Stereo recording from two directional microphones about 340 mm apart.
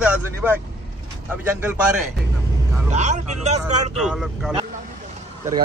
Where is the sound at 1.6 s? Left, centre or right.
Centre.